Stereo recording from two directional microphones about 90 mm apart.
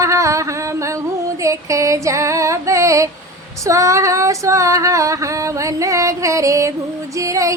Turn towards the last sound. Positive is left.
turn(degrees=-35)  # may be behind; listen again after turning